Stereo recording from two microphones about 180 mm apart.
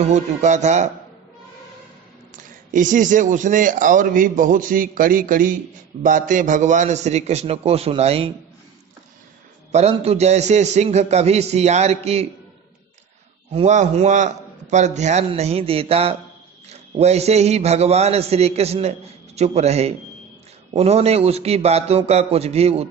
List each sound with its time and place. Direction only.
0.1 s a man's voice: 40° right (ahead or behind)
2.7 s a man's voice: 45° right (ahead or behind)
9.7 s a man's voice: 35° right (ahead or behind)
13.5 s a man's voice: 35° right (ahead or behind)